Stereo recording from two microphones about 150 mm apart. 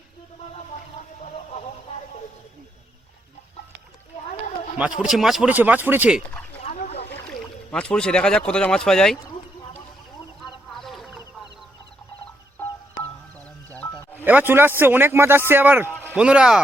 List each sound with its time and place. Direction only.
4.8 s speech: 5° right (ahead or behind)
6.8 s boat: 45° left (ahead or behind)
7.3 s speech: 5° left (ahead or behind)
10.8 s a sound: centre (ahead or behind)
14.3 s speech: 15° right (ahead or behind)